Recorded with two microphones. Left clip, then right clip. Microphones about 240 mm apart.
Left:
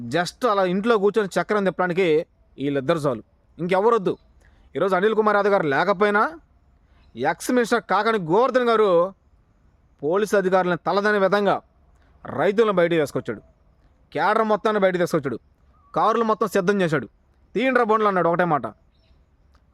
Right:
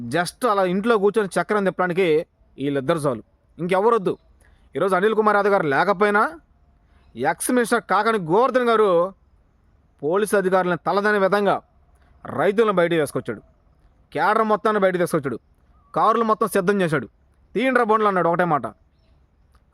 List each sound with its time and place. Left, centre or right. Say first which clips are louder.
0.1 s speech: right 1 dB; centre